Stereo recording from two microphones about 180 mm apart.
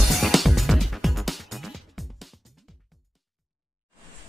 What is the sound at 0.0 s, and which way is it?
Music, centre (ahead or behind).